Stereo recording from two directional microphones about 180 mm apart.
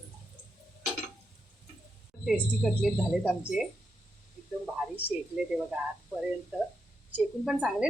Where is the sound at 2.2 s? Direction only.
Centre (ahead or behind).